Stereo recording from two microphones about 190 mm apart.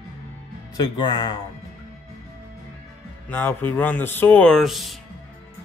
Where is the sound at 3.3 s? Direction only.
10° left (ahead or behind).